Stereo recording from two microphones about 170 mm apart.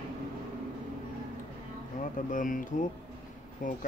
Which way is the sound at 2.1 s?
50° left (ahead or behind).